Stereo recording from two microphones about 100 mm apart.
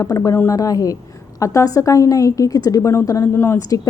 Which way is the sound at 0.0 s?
35° left (ahead or behind).